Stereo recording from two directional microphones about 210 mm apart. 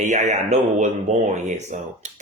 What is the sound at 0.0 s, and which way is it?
A woman's voice, 35° right (ahead or behind).